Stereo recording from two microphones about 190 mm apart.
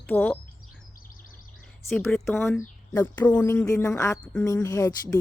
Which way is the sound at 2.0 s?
5° left (ahead or behind).